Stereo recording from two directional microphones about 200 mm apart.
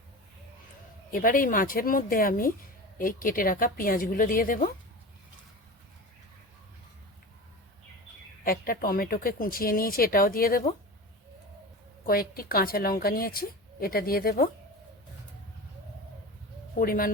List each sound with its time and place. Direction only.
1.1 s a woman's voice: 45° left (ahead or behind)
8.4 s a woman's voice: 45° left (ahead or behind)
12.0 s a woman's voice: 50° left (ahead or behind)
16.7 s a woman's voice: 45° left (ahead or behind)